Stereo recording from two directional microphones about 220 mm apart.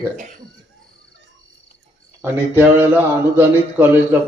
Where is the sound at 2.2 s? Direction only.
10° right (ahead or behind).